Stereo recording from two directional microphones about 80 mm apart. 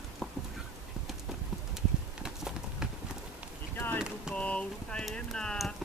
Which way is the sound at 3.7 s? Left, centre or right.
Left.